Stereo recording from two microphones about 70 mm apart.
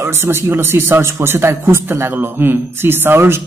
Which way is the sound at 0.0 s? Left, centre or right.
Right.